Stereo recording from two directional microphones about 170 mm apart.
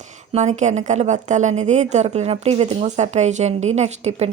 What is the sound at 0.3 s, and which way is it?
A woman's voice, 45° right (ahead or behind).